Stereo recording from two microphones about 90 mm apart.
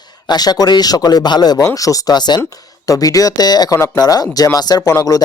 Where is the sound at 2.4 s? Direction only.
40° left (ahead or behind).